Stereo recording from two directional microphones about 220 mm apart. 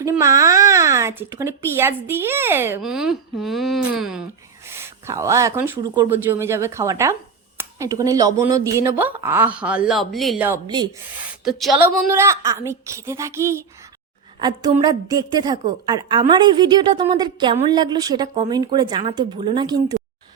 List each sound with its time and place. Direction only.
0.0 s speech: 15° right (ahead or behind)
12.0 s a woman's voice: 15° right (ahead or behind)